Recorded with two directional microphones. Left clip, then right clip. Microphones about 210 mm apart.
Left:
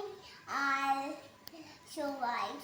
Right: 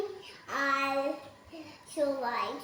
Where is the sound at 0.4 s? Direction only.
15° left (ahead or behind).